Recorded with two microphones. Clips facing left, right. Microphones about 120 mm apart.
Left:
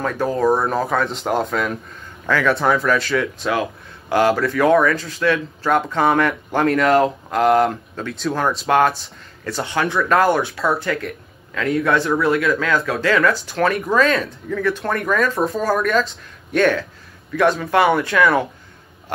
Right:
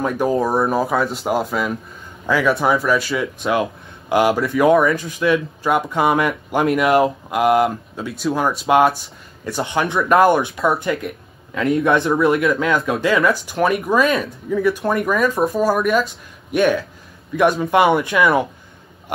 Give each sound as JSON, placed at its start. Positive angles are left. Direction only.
{"t": 0.0, "sound": "speech", "side_deg": -15}